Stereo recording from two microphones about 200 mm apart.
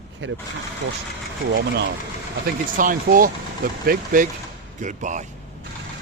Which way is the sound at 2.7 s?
45° right (ahead or behind).